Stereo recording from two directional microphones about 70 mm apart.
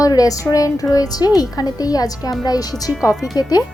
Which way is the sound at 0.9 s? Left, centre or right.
Left.